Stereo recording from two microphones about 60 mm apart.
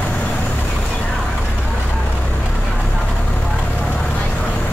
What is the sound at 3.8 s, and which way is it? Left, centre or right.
Vehicle, left.